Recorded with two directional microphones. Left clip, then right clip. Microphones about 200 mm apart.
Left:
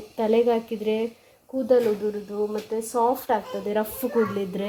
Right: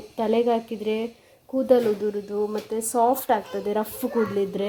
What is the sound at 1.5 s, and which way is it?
Speech, 15° right (ahead or behind).